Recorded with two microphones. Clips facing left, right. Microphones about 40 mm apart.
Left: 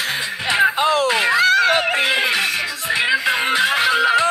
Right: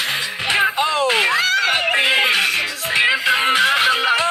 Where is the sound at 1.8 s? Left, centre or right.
Centre.